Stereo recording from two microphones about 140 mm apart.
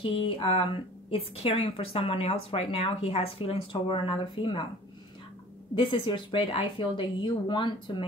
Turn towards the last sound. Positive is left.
turn(degrees=35)  # may be behind; listen again after turning